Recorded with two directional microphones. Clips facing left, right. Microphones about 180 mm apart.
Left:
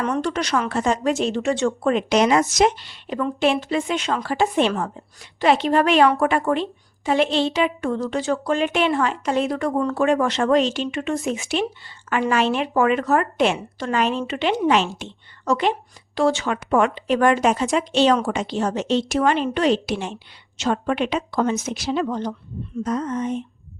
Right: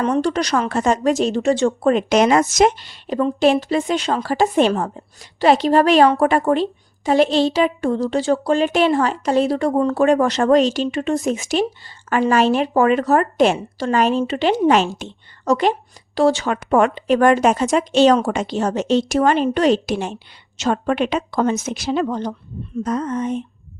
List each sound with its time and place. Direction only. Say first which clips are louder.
0.0 s a woman's voice: right 4 dB; 30° right (ahead or behind)
10.0 s a woman's voice: right 3 dB; 40° right (ahead or behind)